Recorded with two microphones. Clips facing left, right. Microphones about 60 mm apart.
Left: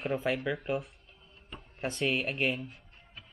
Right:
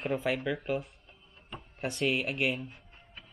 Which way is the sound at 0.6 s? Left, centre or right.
Centre.